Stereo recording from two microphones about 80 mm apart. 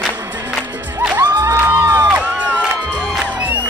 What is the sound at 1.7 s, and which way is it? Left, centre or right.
Music, right.